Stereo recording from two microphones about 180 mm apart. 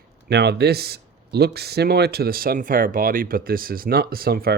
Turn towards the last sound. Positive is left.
turn(degrees=-55)  # may be behind; listen again after turning